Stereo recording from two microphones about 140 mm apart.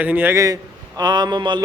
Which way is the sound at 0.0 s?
10° right (ahead or behind).